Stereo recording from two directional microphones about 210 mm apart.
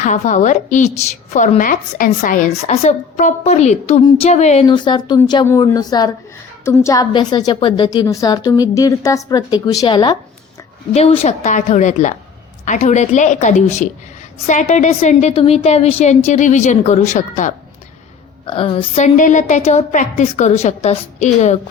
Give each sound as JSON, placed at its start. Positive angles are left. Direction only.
{"t": 0.0, "sound": "a woman's voice", "side_deg": 35}
{"t": 4.6, "sound": "a woman's voice", "side_deg": 20}
{"t": 18.4, "sound": "a woman's voice", "side_deg": 25}